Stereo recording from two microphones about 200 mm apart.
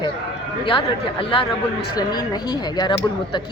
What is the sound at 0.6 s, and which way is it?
Speech, 25° left (ahead or behind).